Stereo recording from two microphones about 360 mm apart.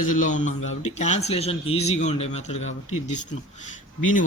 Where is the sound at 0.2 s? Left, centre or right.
Left.